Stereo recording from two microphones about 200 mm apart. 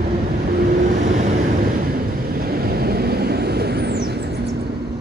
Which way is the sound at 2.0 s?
50° right (ahead or behind).